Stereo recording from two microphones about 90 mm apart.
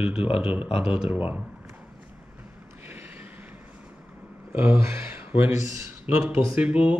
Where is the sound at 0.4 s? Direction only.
10° right (ahead or behind).